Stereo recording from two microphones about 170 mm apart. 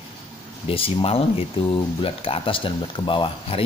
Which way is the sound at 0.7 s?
35° left (ahead or behind).